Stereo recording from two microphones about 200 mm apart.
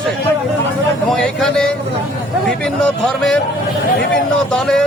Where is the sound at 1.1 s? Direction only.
Centre (ahead or behind).